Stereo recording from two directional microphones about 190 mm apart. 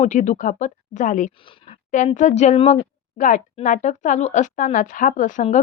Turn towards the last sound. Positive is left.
turn(degrees=40)  # may be behind; listen again after turning